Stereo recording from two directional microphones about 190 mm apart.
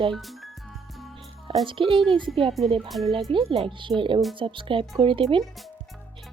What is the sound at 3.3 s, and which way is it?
Speech, 30° right (ahead or behind).